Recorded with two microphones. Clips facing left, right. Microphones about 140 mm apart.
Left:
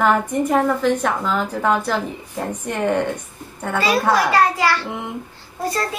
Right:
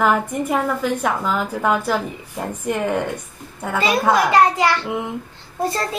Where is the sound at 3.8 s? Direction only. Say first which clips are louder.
Even; 20° right (ahead or behind).